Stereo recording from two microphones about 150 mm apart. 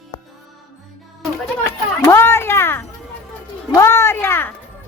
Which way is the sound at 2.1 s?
15° left (ahead or behind).